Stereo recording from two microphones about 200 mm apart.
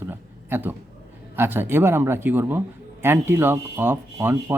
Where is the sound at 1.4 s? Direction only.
10° right (ahead or behind).